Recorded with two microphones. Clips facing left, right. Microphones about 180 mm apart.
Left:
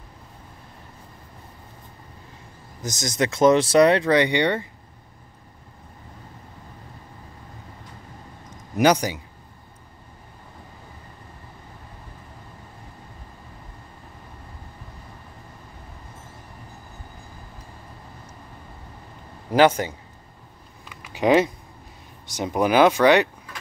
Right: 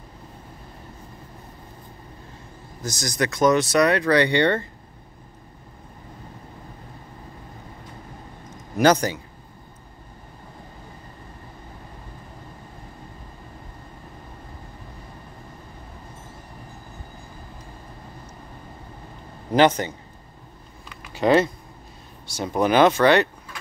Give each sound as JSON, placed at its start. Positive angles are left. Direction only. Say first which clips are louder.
{"t": 2.8, "sound": "speech", "louder": "left 1 dB", "side_deg": 20}
{"t": 8.7, "sound": "speech", "louder": "right 1 dB", "side_deg": 15}
{"t": 19.5, "sound": "speech", "louder": "left 1 dB", "side_deg": 10}
{"t": 20.9, "sound": "a sound", "louder": "even", "side_deg": 10}
{"t": 22.3, "sound": "speech", "louder": "even", "side_deg": 15}